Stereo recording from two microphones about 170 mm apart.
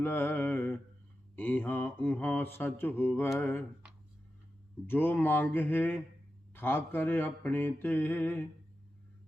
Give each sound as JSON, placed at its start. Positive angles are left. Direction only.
{"t": 0.0, "sound": "mantra", "side_deg": 10}
{"t": 4.9, "sound": "mantra", "side_deg": 10}